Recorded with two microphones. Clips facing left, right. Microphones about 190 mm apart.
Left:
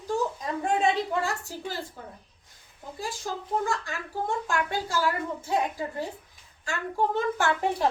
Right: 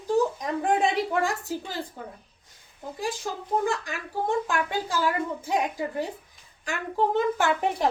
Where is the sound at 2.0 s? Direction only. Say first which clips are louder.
Right 3 dB; 15° right (ahead or behind).